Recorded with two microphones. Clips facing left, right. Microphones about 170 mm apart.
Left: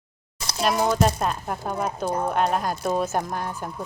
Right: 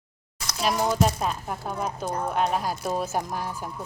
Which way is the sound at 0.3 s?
30° left (ahead or behind).